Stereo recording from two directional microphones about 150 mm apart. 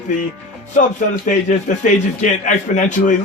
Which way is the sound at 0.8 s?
55° left (ahead or behind).